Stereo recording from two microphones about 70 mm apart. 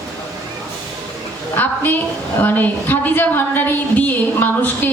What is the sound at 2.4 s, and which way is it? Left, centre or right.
A man's voice, left.